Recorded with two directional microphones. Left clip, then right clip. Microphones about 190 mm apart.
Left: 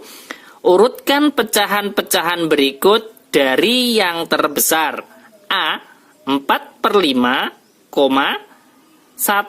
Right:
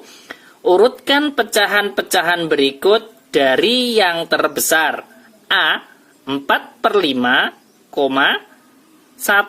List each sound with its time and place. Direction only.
0.0 s speech: 45° left (ahead or behind)